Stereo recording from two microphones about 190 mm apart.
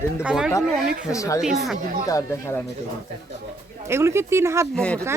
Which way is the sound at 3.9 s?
15° right (ahead or behind).